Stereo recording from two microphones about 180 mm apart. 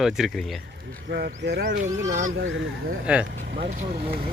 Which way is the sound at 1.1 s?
65° right (ahead or behind).